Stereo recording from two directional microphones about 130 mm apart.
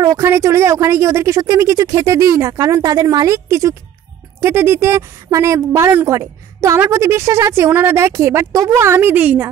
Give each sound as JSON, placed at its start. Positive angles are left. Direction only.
{"t": 0.0, "sound": "speech", "side_deg": -25}